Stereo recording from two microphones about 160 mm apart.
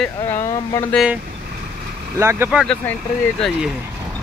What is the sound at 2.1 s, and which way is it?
Speech, 15° right (ahead or behind).